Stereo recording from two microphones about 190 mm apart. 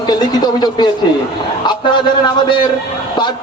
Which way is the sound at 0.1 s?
20° left (ahead or behind).